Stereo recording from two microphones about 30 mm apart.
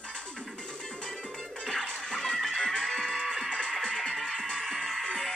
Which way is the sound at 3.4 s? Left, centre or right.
Left.